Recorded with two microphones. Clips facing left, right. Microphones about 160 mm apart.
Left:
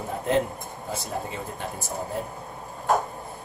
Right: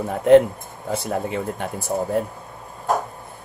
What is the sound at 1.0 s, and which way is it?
Speech, 60° right (ahead or behind).